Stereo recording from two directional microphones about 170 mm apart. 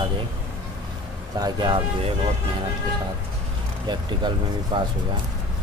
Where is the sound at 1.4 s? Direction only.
25° right (ahead or behind).